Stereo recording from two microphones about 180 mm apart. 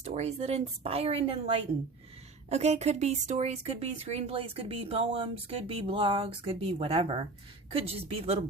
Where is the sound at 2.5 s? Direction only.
35° right (ahead or behind).